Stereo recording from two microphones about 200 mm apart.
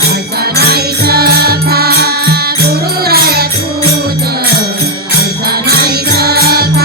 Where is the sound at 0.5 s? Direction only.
50° right (ahead or behind).